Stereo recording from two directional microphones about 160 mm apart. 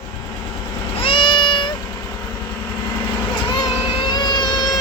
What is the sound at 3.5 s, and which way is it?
Vehicle, 30° left (ahead or behind).